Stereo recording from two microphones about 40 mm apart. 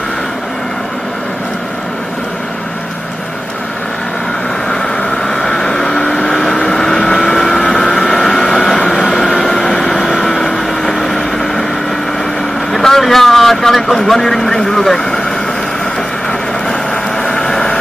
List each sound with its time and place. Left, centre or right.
5.2 s a sound: centre
6.2 s vehicle: centre
12.7 s vehicle: centre
13.7 s speech: centre
16.3 s vehicle: centre